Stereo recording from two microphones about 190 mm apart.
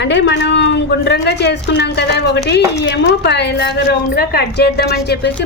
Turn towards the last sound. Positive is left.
turn(degrees=60)  # may be behind; listen again after turning